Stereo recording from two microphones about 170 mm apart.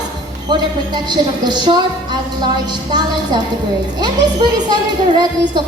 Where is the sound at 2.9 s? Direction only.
25° right (ahead or behind).